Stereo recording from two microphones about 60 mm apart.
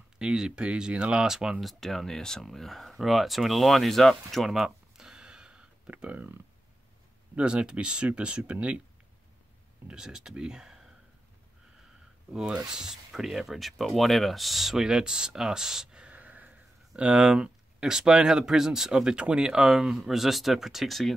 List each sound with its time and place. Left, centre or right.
0.2 s speech: centre
1.6 s speech: centre; by 6.2 s right
7.3 s speech: centre
9.8 s speech: centre
12.3 s speech: centre
16.1 s a sound: right
17.2 s speech: centre